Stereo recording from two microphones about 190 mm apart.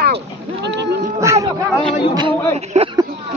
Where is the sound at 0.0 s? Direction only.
60° right (ahead or behind).